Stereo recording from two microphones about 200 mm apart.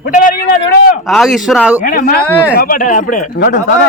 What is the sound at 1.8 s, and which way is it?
A man's voice, 45° left (ahead or behind).